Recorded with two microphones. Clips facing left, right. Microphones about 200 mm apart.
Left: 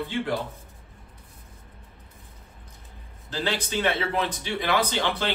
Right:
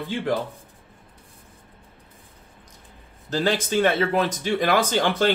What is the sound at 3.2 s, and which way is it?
Speech, 45° right (ahead or behind).